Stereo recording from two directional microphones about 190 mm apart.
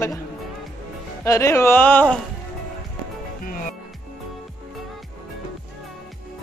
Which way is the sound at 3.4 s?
45° left (ahead or behind).